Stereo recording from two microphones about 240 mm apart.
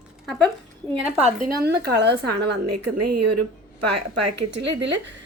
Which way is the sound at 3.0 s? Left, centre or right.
Right.